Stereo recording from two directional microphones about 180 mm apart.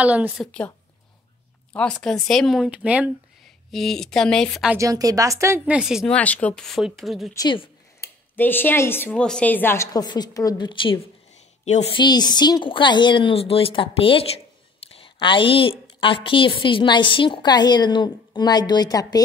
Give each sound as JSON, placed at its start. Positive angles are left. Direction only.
{"t": 0.0, "sound": "a woman's voice", "side_deg": -10}
{"t": 0.5, "sound": "a woman's voice", "side_deg": 5}
{"t": 4.7, "sound": "a woman's voice", "side_deg": -20}
{"t": 5.8, "sound": "speech", "side_deg": -5}
{"t": 6.1, "sound": "speech", "side_deg": 10}
{"t": 7.3, "sound": "a woman's voice", "side_deg": 25}
{"t": 8.4, "sound": "a woman's voice", "side_deg": 10}